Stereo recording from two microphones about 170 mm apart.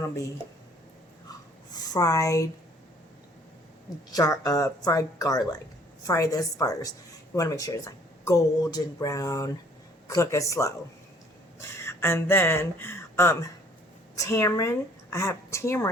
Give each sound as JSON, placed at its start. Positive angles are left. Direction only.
{"t": 1.7, "sound": "speech", "side_deg": 25}
{"t": 4.1, "sound": "a woman's voice", "side_deg": 20}